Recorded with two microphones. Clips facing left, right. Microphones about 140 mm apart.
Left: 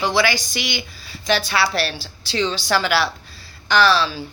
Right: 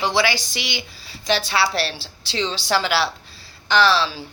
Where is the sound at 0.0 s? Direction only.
30° right (ahead or behind).